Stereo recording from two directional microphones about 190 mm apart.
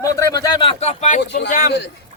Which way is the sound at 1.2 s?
60° left (ahead or behind).